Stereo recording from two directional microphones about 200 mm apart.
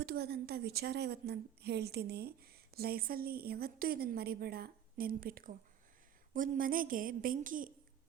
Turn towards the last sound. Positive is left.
turn(degrees=-45)  # may be behind; listen again after turning